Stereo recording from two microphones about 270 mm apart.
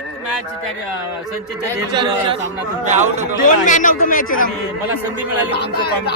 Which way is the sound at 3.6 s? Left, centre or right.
Left.